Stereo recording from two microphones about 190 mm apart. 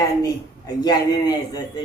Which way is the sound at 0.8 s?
20° left (ahead or behind).